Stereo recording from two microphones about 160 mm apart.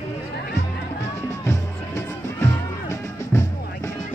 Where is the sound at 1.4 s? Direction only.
20° left (ahead or behind).